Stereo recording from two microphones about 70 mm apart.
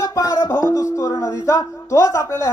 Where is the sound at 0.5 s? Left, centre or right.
Left.